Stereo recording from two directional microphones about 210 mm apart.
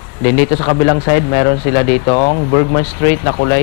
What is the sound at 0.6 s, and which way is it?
Speech, 20° left (ahead or behind).